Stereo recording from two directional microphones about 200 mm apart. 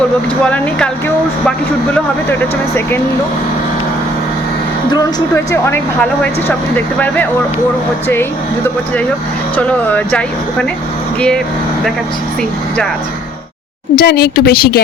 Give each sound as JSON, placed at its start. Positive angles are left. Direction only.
{"t": 0.4, "sound": "speech", "side_deg": 5}
{"t": 4.9, "sound": "speech", "side_deg": 15}
{"t": 9.6, "sound": "speech", "side_deg": 5}
{"t": 12.4, "sound": "speech", "side_deg": 5}
{"t": 13.9, "sound": "speech", "side_deg": 50}